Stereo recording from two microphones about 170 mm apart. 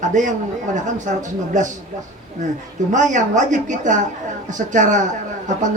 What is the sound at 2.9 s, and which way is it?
Speech, 45° right (ahead or behind).